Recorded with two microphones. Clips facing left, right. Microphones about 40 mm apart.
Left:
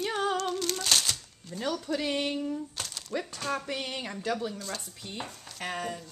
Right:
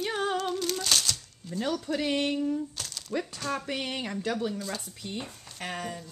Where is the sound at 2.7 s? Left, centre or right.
Centre.